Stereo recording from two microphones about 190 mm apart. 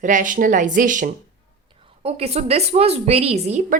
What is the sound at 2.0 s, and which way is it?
A woman's voice, 30° right (ahead or behind).